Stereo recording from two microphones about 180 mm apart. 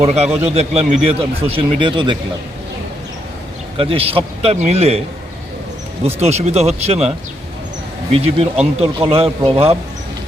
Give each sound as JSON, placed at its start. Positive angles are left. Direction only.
{"t": 0.0, "sound": "speech", "side_deg": -35}
{"t": 3.8, "sound": "speech", "side_deg": -30}
{"t": 6.1, "sound": "speech", "side_deg": -35}
{"t": 8.1, "sound": "speech", "side_deg": -35}